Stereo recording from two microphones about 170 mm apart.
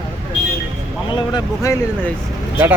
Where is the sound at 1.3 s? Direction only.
20° left (ahead or behind).